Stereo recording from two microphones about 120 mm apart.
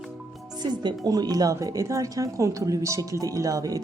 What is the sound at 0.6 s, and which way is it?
A woman's voice, 35° right (ahead or behind).